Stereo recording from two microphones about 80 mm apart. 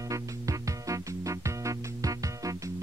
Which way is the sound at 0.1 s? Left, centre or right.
Right.